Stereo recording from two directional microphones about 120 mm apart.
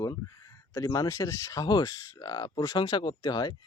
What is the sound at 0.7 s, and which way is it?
Speech, 30° left (ahead or behind).